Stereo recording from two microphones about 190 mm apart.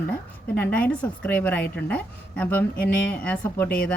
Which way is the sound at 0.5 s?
10° left (ahead or behind).